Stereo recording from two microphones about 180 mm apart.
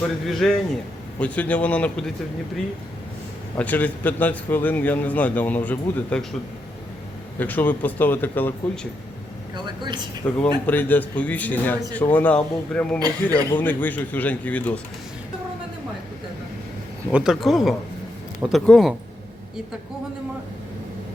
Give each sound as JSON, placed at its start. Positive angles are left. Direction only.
{"t": 0.3, "sound": "a man's voice", "side_deg": 0}
{"t": 3.6, "sound": "a man's voice", "side_deg": 10}
{"t": 7.3, "sound": "a man's voice", "side_deg": 10}
{"t": 9.6, "sound": "speech", "side_deg": -25}
{"t": 10.2, "sound": "a man's voice", "side_deg": 5}
{"t": 17.1, "sound": "speech", "side_deg": -5}